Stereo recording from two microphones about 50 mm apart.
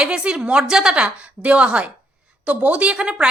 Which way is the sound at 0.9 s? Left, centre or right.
Right.